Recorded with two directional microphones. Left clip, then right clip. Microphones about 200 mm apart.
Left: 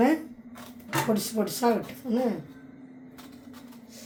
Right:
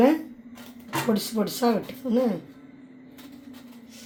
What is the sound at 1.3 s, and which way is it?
Speech, 40° right (ahead or behind).